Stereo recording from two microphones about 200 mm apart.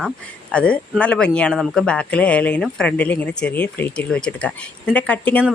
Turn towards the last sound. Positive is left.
turn(degrees=5)  # may be behind; listen again after turning